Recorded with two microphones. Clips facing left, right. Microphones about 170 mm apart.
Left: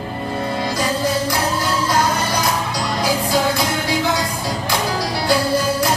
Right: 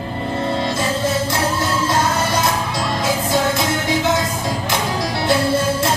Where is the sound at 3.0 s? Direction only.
25° right (ahead or behind).